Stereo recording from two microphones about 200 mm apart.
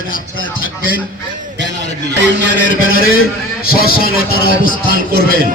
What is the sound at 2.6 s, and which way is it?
Speech, 90° left.